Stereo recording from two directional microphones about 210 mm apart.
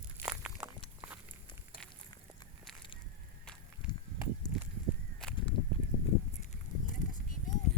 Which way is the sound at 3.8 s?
5° right (ahead or behind).